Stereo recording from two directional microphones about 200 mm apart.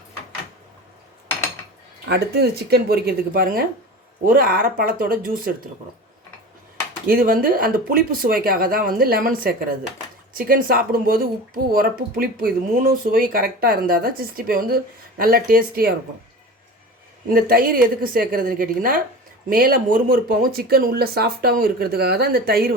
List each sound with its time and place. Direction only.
2.0 s speech: 55° right (ahead or behind)
7.1 s speech: 45° right (ahead or behind)
17.2 s speech: 45° right (ahead or behind)